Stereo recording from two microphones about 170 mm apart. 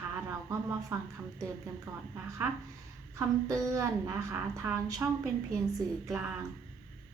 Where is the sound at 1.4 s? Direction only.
15° right (ahead or behind).